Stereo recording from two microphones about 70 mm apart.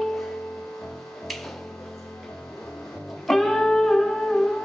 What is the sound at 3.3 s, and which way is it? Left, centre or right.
Music, centre.